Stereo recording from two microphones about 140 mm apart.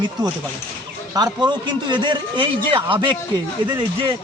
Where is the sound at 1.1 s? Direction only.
30° right (ahead or behind).